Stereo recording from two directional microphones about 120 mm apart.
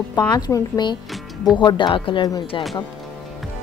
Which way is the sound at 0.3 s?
35° left (ahead or behind).